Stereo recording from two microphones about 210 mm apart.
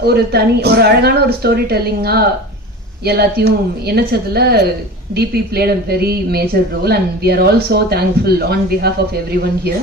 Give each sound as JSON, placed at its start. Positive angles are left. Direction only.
{"t": 0.0, "sound": "speech", "side_deg": -50}